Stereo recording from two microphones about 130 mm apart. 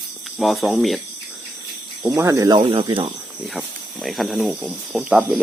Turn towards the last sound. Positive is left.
turn(degrees=-5)  # may be behind; listen again after turning